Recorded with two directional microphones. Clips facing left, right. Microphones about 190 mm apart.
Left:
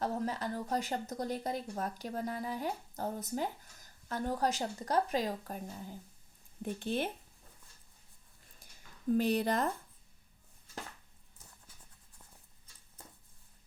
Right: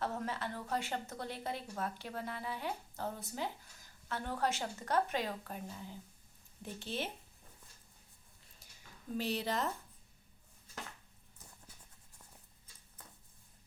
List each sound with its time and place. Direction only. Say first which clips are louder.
0.0 s speech: left 4 dB; 35° left (ahead or behind)
6.6 s speech: left 6 dB; 50° left (ahead or behind)
9.1 s speech: left 6 dB; 50° left (ahead or behind)